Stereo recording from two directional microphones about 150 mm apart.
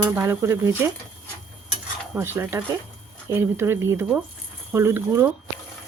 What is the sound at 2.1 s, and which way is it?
Stir, 15° right (ahead or behind).